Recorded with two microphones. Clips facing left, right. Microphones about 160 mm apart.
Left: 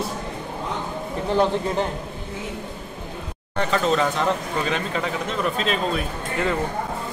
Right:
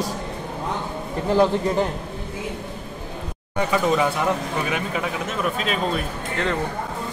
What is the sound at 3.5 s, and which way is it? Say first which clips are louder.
Speech: right 1 dB; 10° right (ahead or behind).